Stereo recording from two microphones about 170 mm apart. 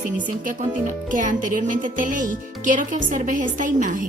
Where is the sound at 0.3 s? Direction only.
50° right (ahead or behind).